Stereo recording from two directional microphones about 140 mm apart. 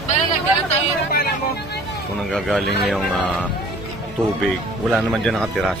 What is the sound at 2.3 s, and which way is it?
Speech, centre (ahead or behind).